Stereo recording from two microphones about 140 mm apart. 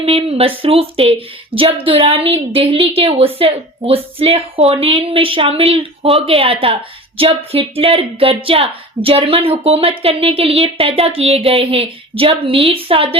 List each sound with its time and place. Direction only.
0.0 s a woman's voice: 45° right (ahead or behind)